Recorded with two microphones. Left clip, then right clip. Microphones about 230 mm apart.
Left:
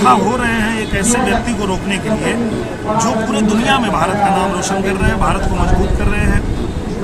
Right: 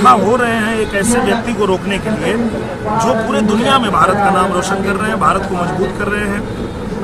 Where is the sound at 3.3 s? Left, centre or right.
Centre.